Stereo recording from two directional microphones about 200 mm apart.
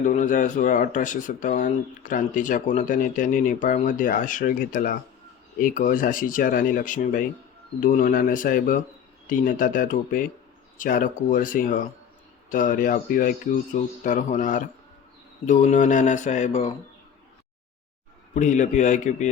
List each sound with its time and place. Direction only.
0.0 s speech: 40° left (ahead or behind)
18.3 s speech: 40° left (ahead or behind)